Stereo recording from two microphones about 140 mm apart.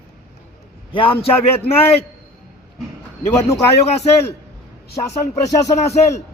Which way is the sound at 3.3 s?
25° left (ahead or behind).